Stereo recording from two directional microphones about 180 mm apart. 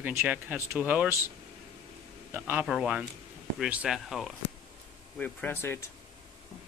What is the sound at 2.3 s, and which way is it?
Speech, 10° right (ahead or behind).